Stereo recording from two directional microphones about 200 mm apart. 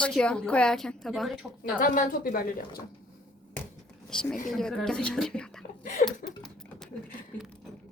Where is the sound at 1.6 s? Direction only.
40° left (ahead or behind).